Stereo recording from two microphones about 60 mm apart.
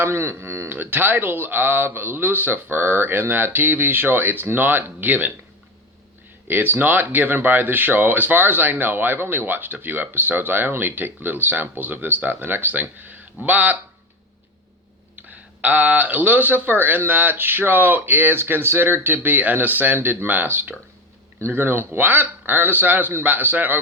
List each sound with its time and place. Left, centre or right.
0.0 s a man's voice: right
0.7 s speech: right
6.5 s speech: right
15.1 s speech: right